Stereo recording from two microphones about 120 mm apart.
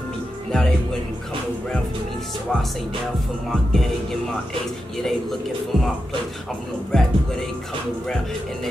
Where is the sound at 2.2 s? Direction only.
Centre (ahead or behind).